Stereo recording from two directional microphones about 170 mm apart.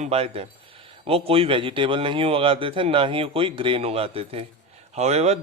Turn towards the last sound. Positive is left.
turn(degrees=-40)  # may be behind; listen again after turning